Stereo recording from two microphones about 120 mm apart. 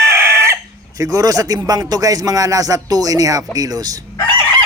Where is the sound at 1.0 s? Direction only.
30° right (ahead or behind).